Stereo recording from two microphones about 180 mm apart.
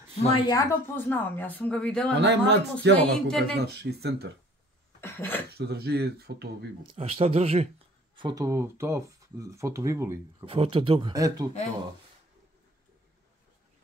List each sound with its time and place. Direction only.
0.4 s speech: 20° left (ahead or behind); by 2.1 s 5° left (ahead or behind)
2.1 s speech: 75° right (ahead or behind)
3.0 s speech: 5° left (ahead or behind)
3.5 s speech: 65° right (ahead or behind)
5.0 s speech: 10° left (ahead or behind)
5.5 s speech: 65° right (ahead or behind)
6.9 s speech: 30° right (ahead or behind)
8.2 s speech: 20° right (ahead or behind)
10.4 s speech: 30° right (ahead or behind)